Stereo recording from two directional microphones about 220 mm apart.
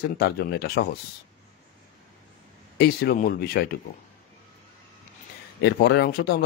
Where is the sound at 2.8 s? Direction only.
45° left (ahead or behind).